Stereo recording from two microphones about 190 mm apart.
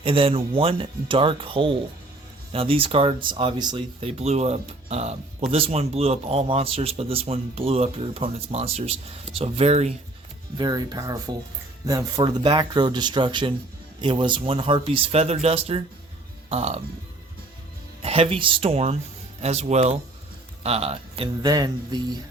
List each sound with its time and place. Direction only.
0.0 s a man's voice: 30° right (ahead or behind)
10.6 s a man's voice: 20° right (ahead or behind)
18.0 s a man's voice: 30° right (ahead or behind)
21.4 s speech: 20° right (ahead or behind)